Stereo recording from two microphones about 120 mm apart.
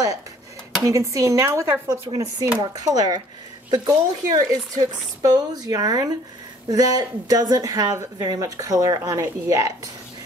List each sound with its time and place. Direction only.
0.8 s a woman's voice: 25° right (ahead or behind)